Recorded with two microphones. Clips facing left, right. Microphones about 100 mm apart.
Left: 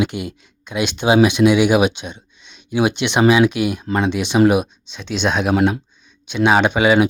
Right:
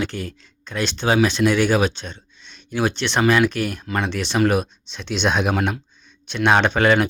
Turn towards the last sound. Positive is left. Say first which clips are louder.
# left 3 dB
turn(degrees=10)  # may be behind; listen again after turning